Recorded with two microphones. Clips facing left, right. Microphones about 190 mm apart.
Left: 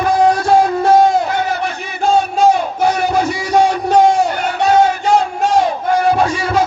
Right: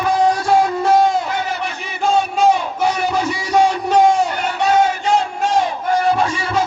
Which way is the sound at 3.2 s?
30° left (ahead or behind).